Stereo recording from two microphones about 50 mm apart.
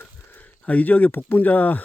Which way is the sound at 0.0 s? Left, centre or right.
Left.